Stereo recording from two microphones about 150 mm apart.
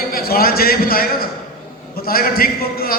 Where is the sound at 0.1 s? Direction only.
80° left.